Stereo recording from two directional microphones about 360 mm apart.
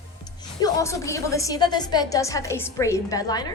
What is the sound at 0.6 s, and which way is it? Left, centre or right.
A woman's voice, centre.